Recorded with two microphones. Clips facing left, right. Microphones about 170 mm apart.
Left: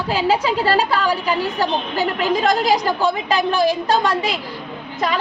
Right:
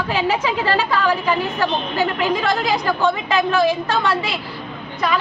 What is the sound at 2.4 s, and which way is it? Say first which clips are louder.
A woman's voice: left 2 dB; 40° left (ahead or behind).